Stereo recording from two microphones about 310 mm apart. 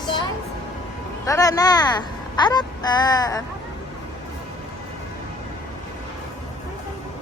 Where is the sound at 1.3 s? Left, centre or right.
Centre.